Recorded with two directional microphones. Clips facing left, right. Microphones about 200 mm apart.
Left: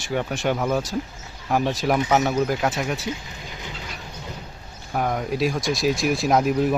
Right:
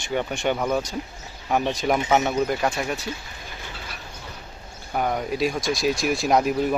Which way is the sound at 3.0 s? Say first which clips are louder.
Left 3 dB; 15° left (ahead or behind).